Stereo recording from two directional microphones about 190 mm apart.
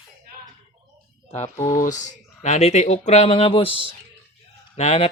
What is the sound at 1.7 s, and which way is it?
Speech, 40° left (ahead or behind).